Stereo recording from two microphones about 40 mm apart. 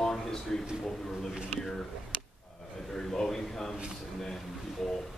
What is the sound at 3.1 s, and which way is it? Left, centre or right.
Speech, centre.